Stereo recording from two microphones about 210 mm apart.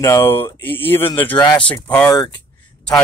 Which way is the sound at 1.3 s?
25° left (ahead or behind).